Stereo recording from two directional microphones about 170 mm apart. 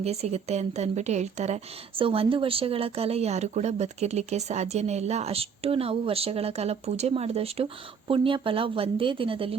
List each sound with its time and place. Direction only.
0.0 s a woman's voice: 40° right (ahead or behind)